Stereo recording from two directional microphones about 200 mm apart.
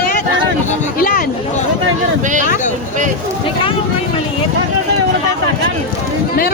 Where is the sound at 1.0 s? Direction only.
45° left (ahead or behind).